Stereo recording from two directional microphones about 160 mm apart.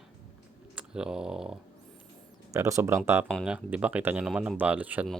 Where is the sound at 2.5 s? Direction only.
15° right (ahead or behind).